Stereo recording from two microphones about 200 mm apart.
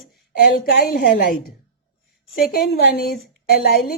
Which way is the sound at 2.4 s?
50° left (ahead or behind).